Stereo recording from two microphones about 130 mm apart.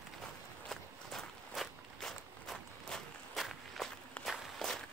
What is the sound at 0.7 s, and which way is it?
Walk, centre (ahead or behind).